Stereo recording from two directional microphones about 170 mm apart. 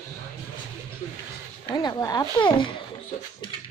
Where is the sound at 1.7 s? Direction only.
25° left (ahead or behind).